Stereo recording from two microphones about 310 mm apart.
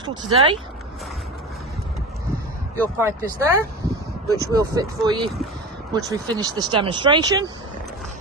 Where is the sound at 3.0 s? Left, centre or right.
Centre.